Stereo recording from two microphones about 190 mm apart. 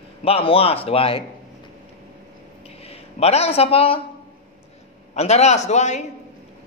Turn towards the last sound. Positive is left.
turn(degrees=40)  # may be behind; listen again after turning